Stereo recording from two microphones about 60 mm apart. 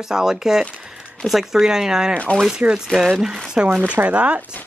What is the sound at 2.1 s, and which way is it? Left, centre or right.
Speech, left.